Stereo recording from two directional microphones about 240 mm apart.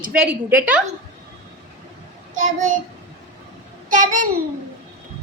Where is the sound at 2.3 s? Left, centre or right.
Right.